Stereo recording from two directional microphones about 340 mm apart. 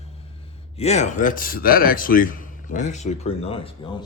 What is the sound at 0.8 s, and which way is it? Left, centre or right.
Speech, centre.